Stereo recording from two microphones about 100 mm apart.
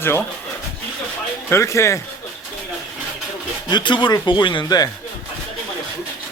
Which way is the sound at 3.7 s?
50° left (ahead or behind).